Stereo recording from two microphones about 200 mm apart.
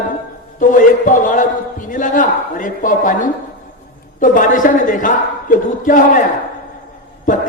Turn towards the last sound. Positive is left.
turn(degrees=40)  # may be behind; listen again after turning